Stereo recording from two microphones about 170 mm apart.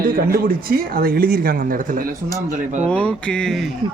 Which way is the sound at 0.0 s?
60° right (ahead or behind).